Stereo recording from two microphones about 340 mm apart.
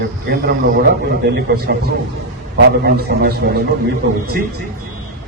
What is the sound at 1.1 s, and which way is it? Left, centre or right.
A man's voice, right.